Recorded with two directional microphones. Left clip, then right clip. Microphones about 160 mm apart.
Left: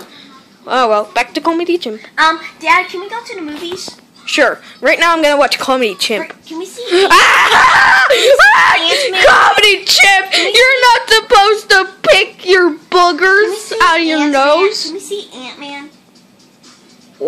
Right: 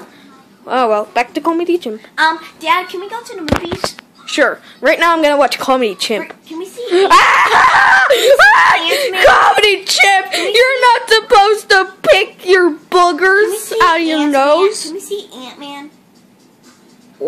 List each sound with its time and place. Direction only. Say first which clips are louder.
0.7 s speech: left 2 dB; 5° right (ahead or behind)
2.6 s a woman's voice: left 3 dB; 5° left (ahead or behind)
4.3 s a woman's voice: left 2 dB; 10° left (ahead or behind)
4.8 s speech: left 1 dB; 5° right (ahead or behind)